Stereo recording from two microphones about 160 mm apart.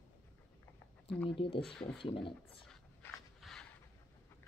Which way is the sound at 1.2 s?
35° left (ahead or behind).